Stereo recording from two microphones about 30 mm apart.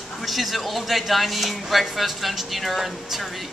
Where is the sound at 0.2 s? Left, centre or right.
Centre.